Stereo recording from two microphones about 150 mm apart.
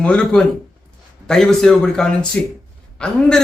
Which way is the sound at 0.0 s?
5° left (ahead or behind).